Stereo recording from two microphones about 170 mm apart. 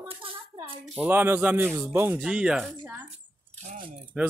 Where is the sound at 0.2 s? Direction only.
30° right (ahead or behind).